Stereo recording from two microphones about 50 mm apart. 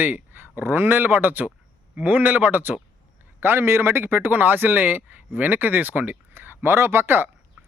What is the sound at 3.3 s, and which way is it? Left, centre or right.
Speech, right.